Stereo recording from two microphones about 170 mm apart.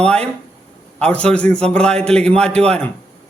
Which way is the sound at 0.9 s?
5° left (ahead or behind).